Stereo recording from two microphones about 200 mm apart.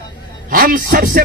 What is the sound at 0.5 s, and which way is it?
Speech, 40° right (ahead or behind).